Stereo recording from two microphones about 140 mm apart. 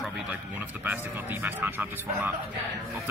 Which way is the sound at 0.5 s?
10° right (ahead or behind).